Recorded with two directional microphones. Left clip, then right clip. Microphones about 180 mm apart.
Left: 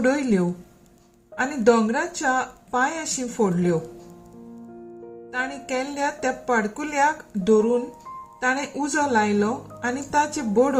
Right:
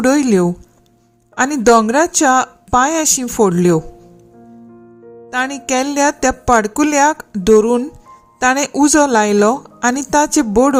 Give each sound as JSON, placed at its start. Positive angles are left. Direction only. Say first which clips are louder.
{"t": 0.0, "sound": "a woman's voice", "louder": "right 9 dB", "side_deg": -50}
{"t": 5.3, "sound": "a woman's voice", "louder": "right 9 dB", "side_deg": -45}